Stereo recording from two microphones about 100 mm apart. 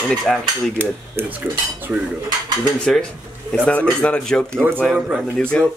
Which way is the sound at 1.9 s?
10° right (ahead or behind).